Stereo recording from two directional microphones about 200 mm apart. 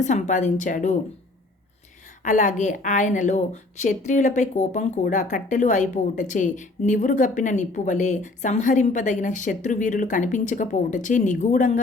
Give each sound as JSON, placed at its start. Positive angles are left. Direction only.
{"t": 0.0, "sound": "speech", "side_deg": 35}
{"t": 2.2, "sound": "speech", "side_deg": 40}